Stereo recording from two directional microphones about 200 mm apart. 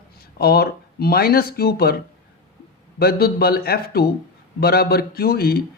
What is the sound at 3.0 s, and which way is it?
Speech, 50° left (ahead or behind).